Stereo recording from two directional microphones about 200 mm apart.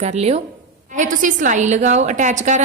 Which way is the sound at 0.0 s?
35° right (ahead or behind).